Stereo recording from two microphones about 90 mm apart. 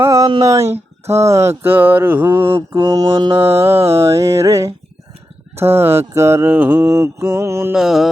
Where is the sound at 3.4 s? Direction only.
90° right.